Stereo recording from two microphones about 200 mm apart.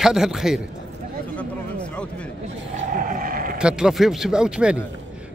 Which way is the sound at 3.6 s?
5° right (ahead or behind).